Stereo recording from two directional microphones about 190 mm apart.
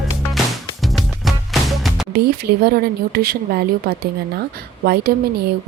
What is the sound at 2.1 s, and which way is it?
A woman's voice, 55° right (ahead or behind).